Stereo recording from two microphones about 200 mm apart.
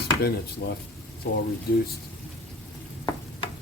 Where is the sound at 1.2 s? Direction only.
50° left (ahead or behind).